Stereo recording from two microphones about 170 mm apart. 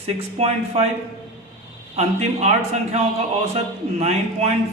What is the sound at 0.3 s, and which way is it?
Speech, 40° right (ahead or behind).